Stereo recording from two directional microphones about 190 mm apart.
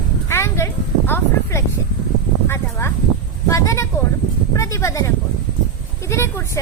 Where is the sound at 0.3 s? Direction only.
15° left (ahead or behind).